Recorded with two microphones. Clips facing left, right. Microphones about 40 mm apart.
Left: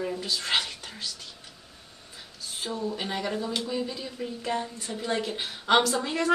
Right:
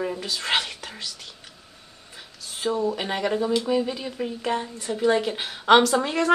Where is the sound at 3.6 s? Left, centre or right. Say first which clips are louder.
Right 7 dB; right.